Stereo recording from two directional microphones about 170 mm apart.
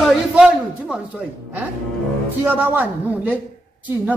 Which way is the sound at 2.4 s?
10° right (ahead or behind).